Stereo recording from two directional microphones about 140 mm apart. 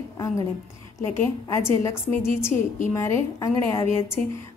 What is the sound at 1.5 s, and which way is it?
A woman's voice, 20° left (ahead or behind).